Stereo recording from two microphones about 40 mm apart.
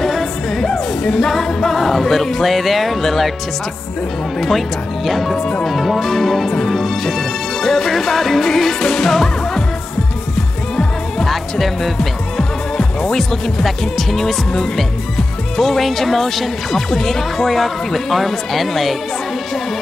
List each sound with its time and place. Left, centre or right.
0.0 s music: centre
1.0 s speech: centre
4.4 s speech: centre
5.4 s speech: centre
5.7 s speech: centre
6.8 s music: centre
11.6 s speech: centre